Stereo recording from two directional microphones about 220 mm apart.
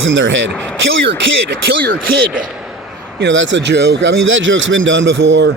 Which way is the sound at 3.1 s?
55° right (ahead or behind).